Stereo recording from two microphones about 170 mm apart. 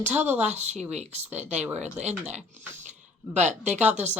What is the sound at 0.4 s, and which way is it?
A woman's voice, 40° right (ahead or behind).